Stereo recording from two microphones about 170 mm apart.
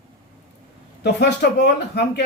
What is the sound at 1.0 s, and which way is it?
Speech, 80° left.